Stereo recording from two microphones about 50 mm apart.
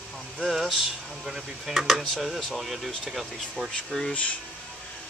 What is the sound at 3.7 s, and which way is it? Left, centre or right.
Speech, centre.